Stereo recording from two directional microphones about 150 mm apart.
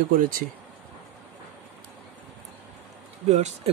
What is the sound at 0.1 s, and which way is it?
Speech, 70° right (ahead or behind).